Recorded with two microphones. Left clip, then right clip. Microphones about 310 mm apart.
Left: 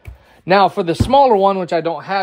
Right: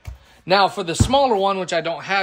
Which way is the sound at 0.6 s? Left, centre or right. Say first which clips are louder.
Left 4 dB; left.